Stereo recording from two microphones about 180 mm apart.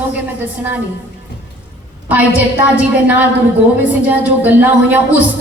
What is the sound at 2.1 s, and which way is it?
Speech, 10° right (ahead or behind).